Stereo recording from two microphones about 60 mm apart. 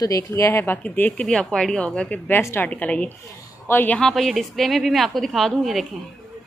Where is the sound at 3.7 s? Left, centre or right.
Left.